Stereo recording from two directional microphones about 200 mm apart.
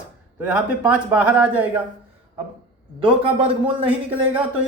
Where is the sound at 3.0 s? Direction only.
25° right (ahead or behind).